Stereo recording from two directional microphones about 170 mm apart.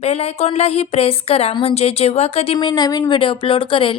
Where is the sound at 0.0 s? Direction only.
35° left (ahead or behind).